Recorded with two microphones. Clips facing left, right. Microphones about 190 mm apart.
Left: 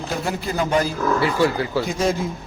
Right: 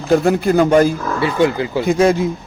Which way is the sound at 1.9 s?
60° right (ahead or behind).